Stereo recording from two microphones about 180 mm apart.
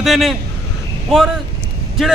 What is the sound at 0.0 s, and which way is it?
Speech, centre (ahead or behind).